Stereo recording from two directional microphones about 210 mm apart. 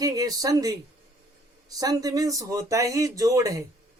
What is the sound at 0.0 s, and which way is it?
Speech, 15° right (ahead or behind).